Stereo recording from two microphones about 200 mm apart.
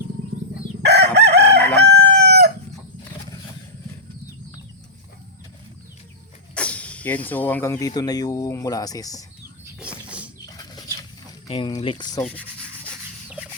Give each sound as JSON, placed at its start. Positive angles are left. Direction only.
{"t": 0.9, "sound": "chicken", "side_deg": -60}
{"t": 6.5, "sound": "speech", "side_deg": 5}
{"t": 10.4, "sound": "a sound", "side_deg": 20}
{"t": 11.4, "sound": "speech", "side_deg": 25}
{"t": 12.2, "sound": "speech", "side_deg": 5}